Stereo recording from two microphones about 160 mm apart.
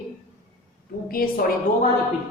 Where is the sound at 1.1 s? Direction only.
65° left (ahead or behind).